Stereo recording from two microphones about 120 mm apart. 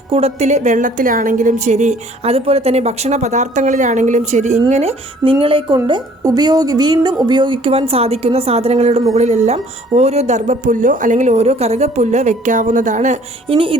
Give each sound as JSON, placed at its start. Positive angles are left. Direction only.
{"t": 0.1, "sound": "a woman's voice", "side_deg": -60}
{"t": 4.7, "sound": "a woman's voice", "side_deg": -60}
{"t": 5.7, "sound": "a woman's voice", "side_deg": -35}
{"t": 13.5, "sound": "a woman's voice", "side_deg": -50}